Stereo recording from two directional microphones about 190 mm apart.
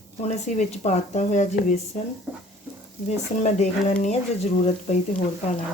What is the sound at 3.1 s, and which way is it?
Speech, 35° left (ahead or behind).